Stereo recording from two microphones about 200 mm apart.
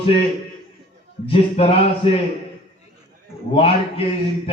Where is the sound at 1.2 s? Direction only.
30° left (ahead or behind).